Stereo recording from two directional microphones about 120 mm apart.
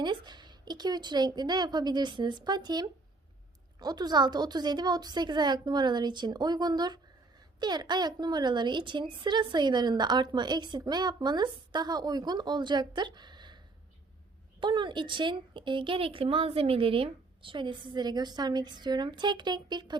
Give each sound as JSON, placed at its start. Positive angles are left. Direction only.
{"t": 0.0, "sound": "a woman's voice", "side_deg": -40}
{"t": 14.6, "sound": "a woman's voice", "side_deg": -40}